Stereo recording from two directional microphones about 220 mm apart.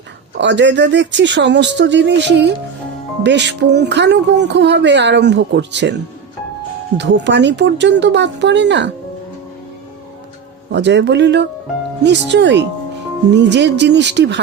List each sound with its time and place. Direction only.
0.3 s speech: 55° right (ahead or behind)
10.7 s speech: 55° right (ahead or behind)